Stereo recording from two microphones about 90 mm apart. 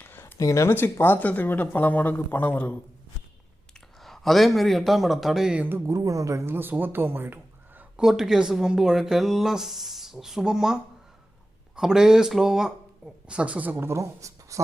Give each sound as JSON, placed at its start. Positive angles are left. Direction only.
{"t": 0.0, "sound": "a sound", "side_deg": 25}
{"t": 0.3, "sound": "speech", "side_deg": 35}
{"t": 4.0, "sound": "speech", "side_deg": 0}
{"t": 5.6, "sound": "speech", "side_deg": -25}
{"t": 5.9, "sound": "speech", "side_deg": -40}
{"t": 7.8, "sound": "speech", "side_deg": -10}
{"t": 11.8, "sound": "speech", "side_deg": -5}